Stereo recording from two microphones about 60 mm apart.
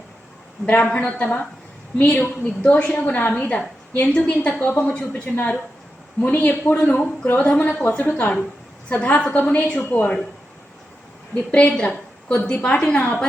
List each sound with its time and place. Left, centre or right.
0.6 s a woman's voice: left
4.9 s a woman's voice: left
7.3 s a woman's voice: left
11.8 s a woman's voice: left